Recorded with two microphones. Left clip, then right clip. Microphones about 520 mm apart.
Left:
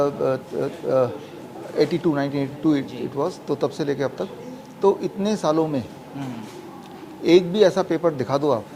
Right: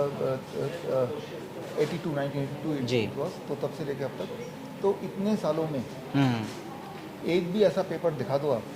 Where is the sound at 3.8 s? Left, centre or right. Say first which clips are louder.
Left 9 dB; left.